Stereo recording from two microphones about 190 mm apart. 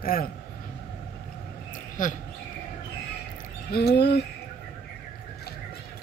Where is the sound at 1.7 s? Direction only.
45° left (ahead or behind).